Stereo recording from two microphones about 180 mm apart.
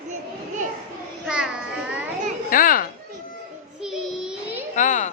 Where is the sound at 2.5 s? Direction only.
50° left (ahead or behind).